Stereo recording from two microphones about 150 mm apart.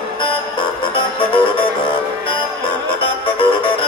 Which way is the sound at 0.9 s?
35° left (ahead or behind).